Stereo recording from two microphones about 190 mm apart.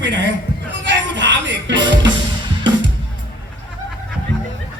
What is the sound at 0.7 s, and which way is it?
Music, 70° right (ahead or behind).